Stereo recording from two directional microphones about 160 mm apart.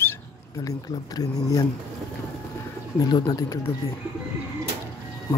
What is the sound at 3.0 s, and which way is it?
Speech, 25° left (ahead or behind).